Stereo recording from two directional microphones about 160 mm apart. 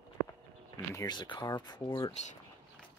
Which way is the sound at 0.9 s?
25° left (ahead or behind).